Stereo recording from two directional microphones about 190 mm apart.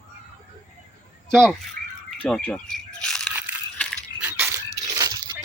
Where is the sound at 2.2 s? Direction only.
5° left (ahead or behind).